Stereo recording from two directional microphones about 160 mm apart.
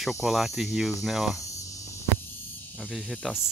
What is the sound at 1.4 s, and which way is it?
Cricket, 20° left (ahead or behind).